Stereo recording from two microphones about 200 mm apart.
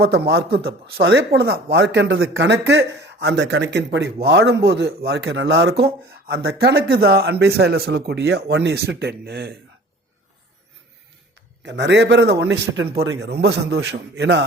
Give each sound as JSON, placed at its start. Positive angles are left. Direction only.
{"t": 0.0, "sound": "a man's voice", "side_deg": -55}
{"t": 11.6, "sound": "a man's voice", "side_deg": -60}